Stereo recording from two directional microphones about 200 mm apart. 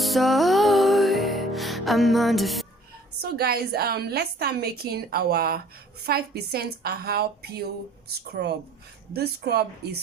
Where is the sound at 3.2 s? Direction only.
50° right (ahead or behind).